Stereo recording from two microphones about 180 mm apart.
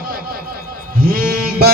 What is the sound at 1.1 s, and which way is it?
Music, 55° right (ahead or behind).